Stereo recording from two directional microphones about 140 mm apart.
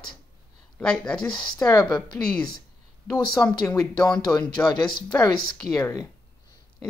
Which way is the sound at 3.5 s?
25° left (ahead or behind).